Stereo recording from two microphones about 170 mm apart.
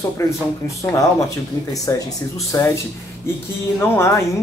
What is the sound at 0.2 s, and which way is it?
Speech, 15° left (ahead or behind).